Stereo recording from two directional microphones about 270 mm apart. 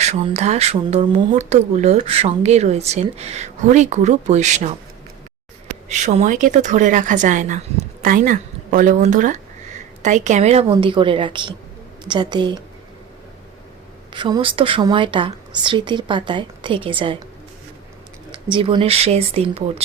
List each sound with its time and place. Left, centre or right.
0.0 s speech: right
5.9 s a woman's voice: right
14.1 s a woman's voice: centre
18.5 s speech: centre